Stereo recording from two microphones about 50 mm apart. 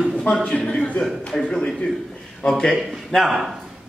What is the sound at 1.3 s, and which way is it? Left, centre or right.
Speech, centre.